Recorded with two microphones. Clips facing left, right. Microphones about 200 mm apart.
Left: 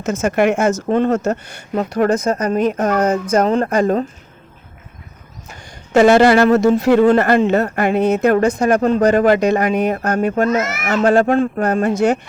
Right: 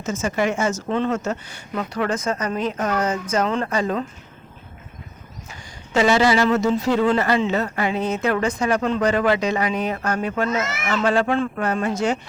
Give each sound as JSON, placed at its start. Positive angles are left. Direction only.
{"t": 0.0, "sound": "speech", "side_deg": 65}
{"t": 0.9, "sound": "speech", "side_deg": 45}
{"t": 2.0, "sound": "speech", "side_deg": 40}
{"t": 5.9, "sound": "speech", "side_deg": 55}
{"t": 7.0, "sound": "speech", "side_deg": 50}
{"t": 11.9, "sound": "speech", "side_deg": 55}